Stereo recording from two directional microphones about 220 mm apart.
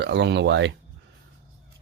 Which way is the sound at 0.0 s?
50° right (ahead or behind).